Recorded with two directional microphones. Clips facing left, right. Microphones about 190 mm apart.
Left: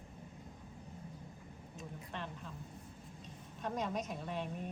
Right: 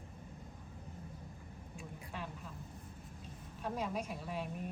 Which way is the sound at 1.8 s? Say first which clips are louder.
Left 1 dB; 5° right (ahead or behind).